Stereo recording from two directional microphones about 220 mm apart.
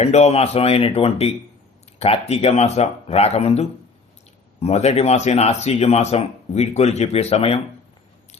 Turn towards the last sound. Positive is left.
turn(degrees=30)  # may be behind; listen again after turning